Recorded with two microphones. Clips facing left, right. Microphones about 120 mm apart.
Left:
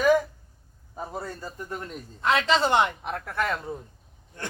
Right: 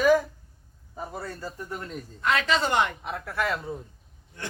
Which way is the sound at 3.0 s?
Centre (ahead or behind).